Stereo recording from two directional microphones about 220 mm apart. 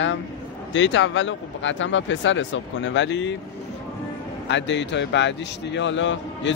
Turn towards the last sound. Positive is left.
turn(degrees=55)  # may be behind; listen again after turning